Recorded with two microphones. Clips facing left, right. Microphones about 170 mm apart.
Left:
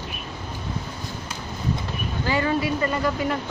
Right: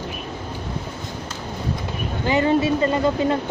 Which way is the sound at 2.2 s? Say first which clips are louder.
Right 5 dB; 20° right (ahead or behind).